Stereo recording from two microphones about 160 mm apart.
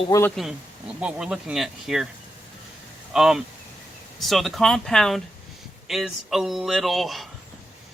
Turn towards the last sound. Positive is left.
turn(degrees=0)  # may be behind; listen again after turning